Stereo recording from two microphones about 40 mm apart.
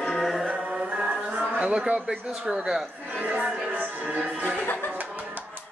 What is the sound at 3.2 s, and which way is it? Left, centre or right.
Music, right.